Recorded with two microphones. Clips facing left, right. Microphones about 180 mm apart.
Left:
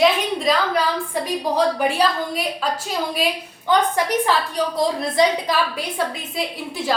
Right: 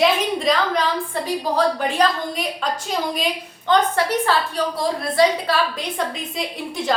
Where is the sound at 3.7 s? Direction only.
15° left (ahead or behind).